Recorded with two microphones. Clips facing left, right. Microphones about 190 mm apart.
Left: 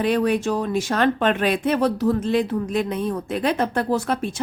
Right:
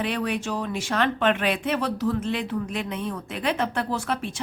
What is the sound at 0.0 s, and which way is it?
Speech, 40° left (ahead or behind).